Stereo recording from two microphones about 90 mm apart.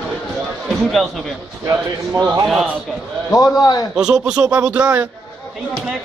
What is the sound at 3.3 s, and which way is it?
Speech, 45° left (ahead or behind).